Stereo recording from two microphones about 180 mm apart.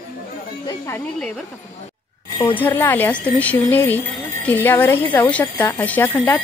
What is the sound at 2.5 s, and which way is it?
Speech, 10° left (ahead or behind).